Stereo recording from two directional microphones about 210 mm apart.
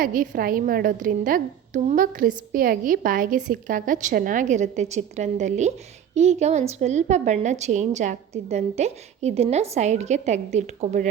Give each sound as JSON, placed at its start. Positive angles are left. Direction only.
{"t": 0.0, "sound": "a woman's voice", "side_deg": -40}